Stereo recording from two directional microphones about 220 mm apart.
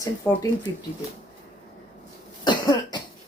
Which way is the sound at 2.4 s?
20° left (ahead or behind).